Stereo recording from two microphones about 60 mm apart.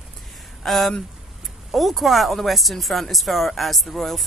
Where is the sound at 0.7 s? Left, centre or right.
Centre.